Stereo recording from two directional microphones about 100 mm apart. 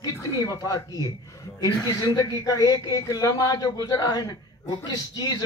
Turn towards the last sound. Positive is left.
turn(degrees=40)  # may be behind; listen again after turning